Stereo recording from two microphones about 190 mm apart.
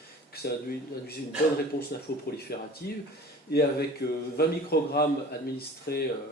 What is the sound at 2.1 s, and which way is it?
Speech, 55° left (ahead or behind).